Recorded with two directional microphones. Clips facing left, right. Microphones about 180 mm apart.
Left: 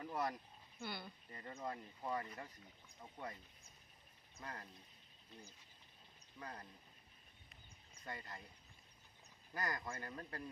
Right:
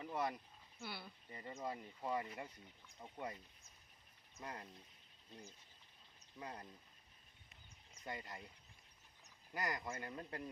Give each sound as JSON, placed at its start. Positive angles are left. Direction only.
{"t": 0.0, "sound": "a sound", "side_deg": 0}
{"t": 0.8, "sound": "speech", "side_deg": -5}
{"t": 4.4, "sound": "speech", "side_deg": -20}
{"t": 6.4, "sound": "speech", "side_deg": -20}
{"t": 8.0, "sound": "speech", "side_deg": -15}
{"t": 9.6, "sound": "speech", "side_deg": -15}